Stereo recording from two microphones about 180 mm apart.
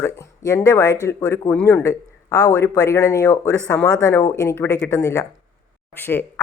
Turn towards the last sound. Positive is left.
turn(degrees=10)  # may be behind; listen again after turning